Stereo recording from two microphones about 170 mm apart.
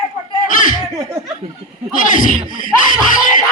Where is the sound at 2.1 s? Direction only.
50° left (ahead or behind).